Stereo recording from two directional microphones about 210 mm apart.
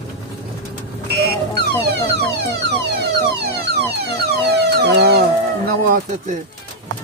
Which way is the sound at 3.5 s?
50° right (ahead or behind).